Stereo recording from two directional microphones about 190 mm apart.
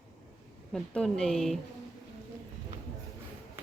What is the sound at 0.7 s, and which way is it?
Speech, 5° left (ahead or behind).